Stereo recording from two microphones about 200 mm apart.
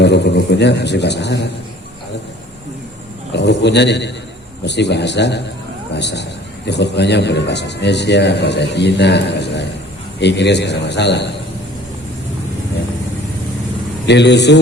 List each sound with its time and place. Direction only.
0.0 s a man's voice: 60° left (ahead or behind)
3.3 s a man's voice: 60° left (ahead or behind)
14.1 s a man's voice: 60° left (ahead or behind)